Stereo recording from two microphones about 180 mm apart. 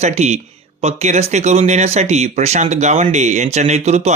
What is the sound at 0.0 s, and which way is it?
Speech, 40° right (ahead or behind).